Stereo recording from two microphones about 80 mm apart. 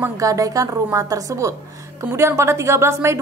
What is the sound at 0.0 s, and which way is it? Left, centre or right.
A woman's voice, right.